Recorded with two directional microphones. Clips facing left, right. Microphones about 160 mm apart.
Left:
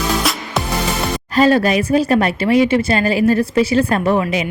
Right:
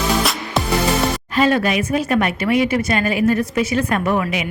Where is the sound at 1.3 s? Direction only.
35° left (ahead or behind).